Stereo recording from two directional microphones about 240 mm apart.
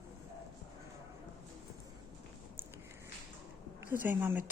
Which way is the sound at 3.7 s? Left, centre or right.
Centre.